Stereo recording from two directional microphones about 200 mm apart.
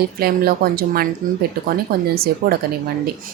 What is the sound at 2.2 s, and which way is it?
Speech, 50° right (ahead or behind).